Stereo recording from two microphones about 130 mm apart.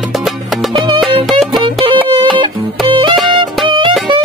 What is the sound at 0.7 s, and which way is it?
Music, 35° right (ahead or behind).